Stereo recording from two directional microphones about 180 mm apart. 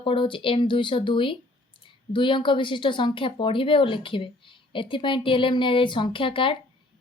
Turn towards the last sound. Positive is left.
turn(degrees=30)  # may be behind; listen again after turning